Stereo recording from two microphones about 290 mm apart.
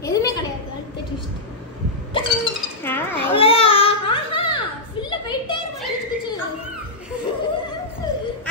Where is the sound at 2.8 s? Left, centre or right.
Centre.